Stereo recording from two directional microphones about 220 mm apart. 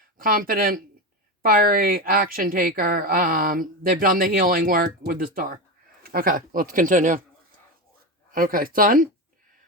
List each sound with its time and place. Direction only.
0.2 s a woman's voice: 40° right (ahead or behind)
8.3 s a woman's voice: 40° right (ahead or behind)